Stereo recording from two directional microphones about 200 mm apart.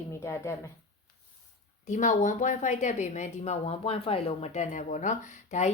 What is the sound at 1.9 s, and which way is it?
A woman's voice, 40° left (ahead or behind).